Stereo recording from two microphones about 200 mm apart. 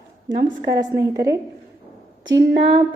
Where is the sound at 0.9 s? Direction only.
15° right (ahead or behind).